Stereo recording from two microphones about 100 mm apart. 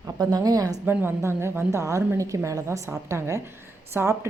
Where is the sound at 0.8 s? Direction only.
25° right (ahead or behind).